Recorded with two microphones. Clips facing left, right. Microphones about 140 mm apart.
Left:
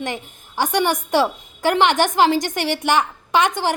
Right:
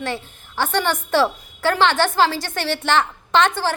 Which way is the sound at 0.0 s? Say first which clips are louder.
Even; 15° left (ahead or behind).